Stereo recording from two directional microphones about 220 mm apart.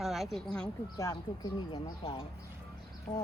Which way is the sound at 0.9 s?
15° left (ahead or behind).